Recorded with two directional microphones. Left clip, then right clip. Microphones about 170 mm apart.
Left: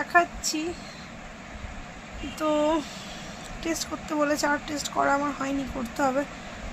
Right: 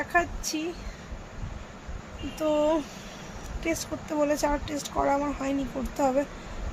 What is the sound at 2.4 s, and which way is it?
A woman's voice, 15° right (ahead or behind).